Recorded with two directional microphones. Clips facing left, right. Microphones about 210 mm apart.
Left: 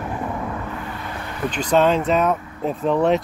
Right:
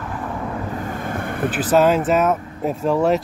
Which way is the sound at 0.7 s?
45° right (ahead or behind).